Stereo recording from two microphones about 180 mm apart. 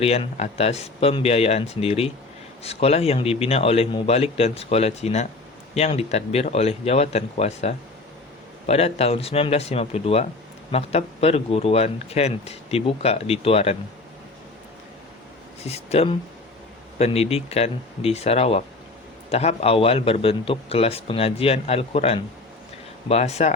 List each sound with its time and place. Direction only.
0.0 s a man's voice: 35° left (ahead or behind)
15.6 s a man's voice: 35° left (ahead or behind)